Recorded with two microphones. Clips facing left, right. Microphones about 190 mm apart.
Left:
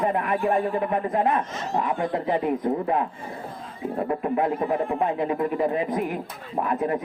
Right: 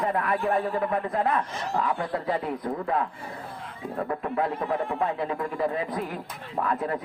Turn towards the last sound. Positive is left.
turn(degrees=20)  # may be behind; listen again after turning